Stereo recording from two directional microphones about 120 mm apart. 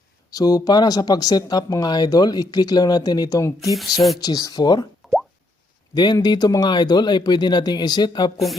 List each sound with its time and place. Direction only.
0.3 s speech: 30° left (ahead or behind)
5.9 s speech: 35° left (ahead or behind)